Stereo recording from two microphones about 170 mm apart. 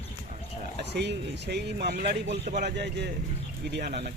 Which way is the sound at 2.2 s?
40° right (ahead or behind).